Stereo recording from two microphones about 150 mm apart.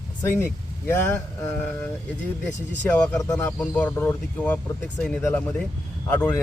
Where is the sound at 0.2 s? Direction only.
15° left (ahead or behind).